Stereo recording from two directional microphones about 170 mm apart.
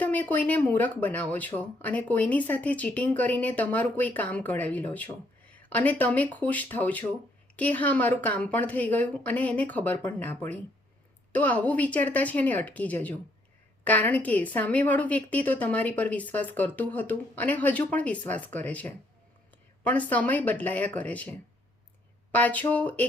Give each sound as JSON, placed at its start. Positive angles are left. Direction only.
{"t": 0.0, "sound": "speech", "side_deg": 10}